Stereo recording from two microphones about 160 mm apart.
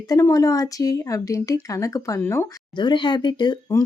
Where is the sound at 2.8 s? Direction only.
30° left (ahead or behind).